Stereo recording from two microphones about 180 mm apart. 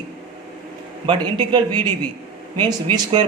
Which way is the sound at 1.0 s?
25° right (ahead or behind).